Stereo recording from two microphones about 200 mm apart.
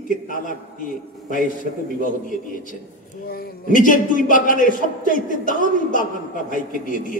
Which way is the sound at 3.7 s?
40° left (ahead or behind).